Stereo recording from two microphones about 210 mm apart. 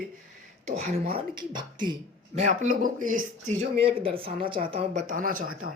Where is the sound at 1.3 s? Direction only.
20° right (ahead or behind).